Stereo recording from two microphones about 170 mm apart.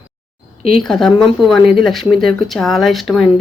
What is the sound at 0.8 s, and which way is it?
Speech, centre (ahead or behind).